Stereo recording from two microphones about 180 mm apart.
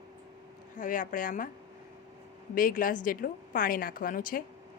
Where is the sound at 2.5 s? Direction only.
50° left (ahead or behind).